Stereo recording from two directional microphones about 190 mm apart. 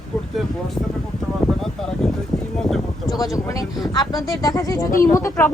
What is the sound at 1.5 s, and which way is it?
Speech, centre (ahead or behind).